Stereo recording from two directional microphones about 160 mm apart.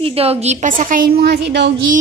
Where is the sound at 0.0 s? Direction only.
40° right (ahead or behind); by 2.0 s 90° right.